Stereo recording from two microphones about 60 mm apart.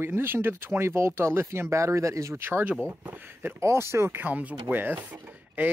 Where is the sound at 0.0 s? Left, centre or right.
Right.